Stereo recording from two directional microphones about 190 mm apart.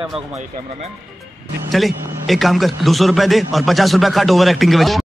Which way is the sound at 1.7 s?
Centre (ahead or behind).